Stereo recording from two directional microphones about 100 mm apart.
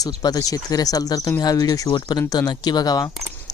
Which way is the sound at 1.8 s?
50° left (ahead or behind).